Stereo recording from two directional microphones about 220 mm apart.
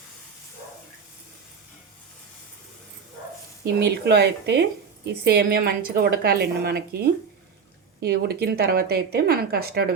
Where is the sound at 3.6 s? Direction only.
50° right (ahead or behind).